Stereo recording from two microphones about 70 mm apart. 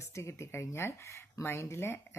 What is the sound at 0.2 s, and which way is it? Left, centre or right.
Speech, left.